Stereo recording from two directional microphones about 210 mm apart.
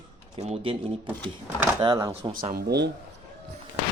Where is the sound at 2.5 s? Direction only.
50° right (ahead or behind).